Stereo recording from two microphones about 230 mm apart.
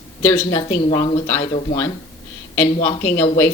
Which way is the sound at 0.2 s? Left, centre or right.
Centre.